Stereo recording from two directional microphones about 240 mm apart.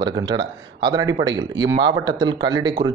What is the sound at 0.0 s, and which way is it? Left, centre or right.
Speech, centre.